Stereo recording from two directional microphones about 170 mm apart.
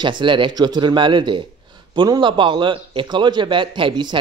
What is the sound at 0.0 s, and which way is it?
A man's voice, 30° right (ahead or behind).